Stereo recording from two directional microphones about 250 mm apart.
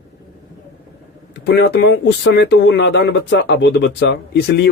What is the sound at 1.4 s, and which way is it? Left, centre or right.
Speech, left.